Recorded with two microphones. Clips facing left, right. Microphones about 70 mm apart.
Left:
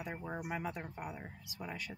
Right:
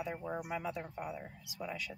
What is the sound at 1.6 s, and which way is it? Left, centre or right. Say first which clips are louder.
Speech: right 2 dB; left.